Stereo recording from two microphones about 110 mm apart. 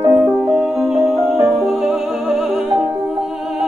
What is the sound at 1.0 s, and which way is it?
Music, 25° right (ahead or behind).